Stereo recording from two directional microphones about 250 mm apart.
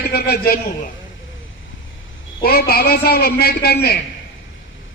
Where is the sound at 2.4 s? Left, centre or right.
Left.